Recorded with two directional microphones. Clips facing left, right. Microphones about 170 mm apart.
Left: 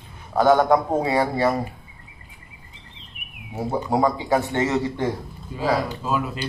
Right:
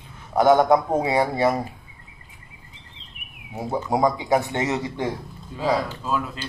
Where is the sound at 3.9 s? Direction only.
15° right (ahead or behind).